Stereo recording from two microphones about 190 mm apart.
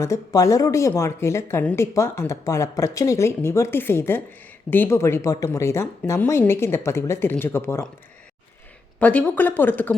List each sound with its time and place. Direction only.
0.0 s speech: 15° left (ahead or behind)
9.0 s speech: 10° left (ahead or behind)